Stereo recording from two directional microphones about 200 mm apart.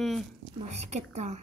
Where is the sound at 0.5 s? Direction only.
35° right (ahead or behind).